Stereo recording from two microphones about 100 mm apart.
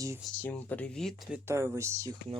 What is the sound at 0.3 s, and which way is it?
Speech, 15° left (ahead or behind).